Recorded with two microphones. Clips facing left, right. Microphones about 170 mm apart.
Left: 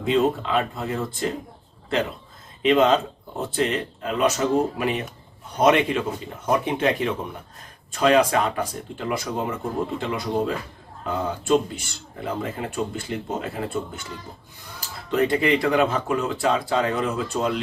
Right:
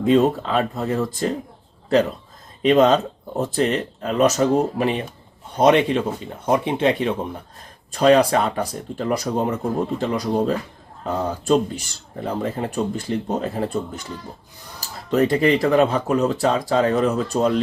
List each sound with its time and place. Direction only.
0.0 s speech: 40° right (ahead or behind)
2.6 s speech: 40° right (ahead or behind)
7.9 s speech: 35° right (ahead or behind)